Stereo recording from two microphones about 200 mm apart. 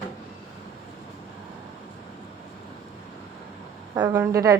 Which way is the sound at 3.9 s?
15° right (ahead or behind).